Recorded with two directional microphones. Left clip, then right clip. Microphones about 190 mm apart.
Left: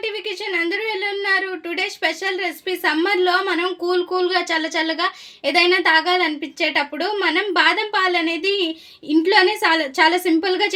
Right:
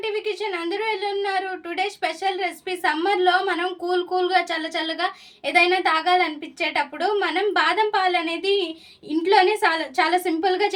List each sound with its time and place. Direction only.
1.8 s a woman's voice: 40° left (ahead or behind)